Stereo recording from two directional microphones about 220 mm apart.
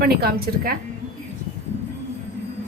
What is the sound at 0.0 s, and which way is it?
Speech, 45° right (ahead or behind).